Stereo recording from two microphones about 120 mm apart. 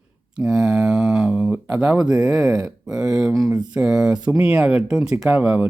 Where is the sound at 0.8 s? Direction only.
5° right (ahead or behind).